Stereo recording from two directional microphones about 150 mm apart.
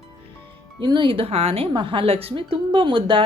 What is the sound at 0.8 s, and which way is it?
A woman's voice, 30° right (ahead or behind).